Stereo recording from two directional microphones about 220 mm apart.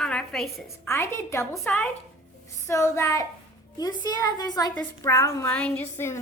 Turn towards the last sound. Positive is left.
turn(degrees=10)  # may be behind; listen again after turning